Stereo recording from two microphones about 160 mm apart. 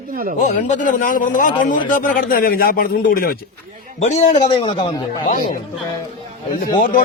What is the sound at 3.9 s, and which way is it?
Speech, 45° left (ahead or behind).